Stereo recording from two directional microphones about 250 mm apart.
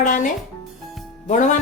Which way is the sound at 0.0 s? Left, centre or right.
Left.